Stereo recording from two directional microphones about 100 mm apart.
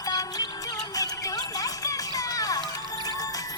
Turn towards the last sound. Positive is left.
turn(degrees=40)  # may be behind; listen again after turning